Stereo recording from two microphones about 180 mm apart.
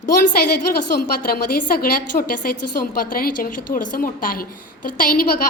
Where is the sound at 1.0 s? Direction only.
55° left (ahead or behind).